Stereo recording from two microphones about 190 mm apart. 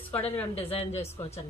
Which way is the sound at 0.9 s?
30° left (ahead or behind).